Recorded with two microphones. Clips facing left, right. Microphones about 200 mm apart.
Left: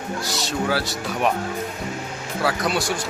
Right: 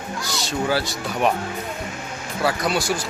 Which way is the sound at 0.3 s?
Centre (ahead or behind).